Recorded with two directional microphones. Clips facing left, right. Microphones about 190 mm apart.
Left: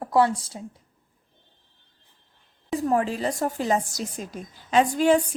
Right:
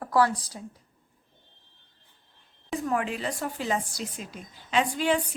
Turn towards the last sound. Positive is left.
turn(degrees=45)  # may be behind; listen again after turning